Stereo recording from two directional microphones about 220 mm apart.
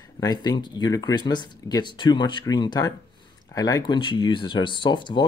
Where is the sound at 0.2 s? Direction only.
20° left (ahead or behind).